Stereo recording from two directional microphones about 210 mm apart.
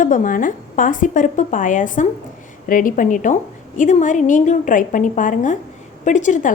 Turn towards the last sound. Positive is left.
turn(degrees=35)  # may be behind; listen again after turning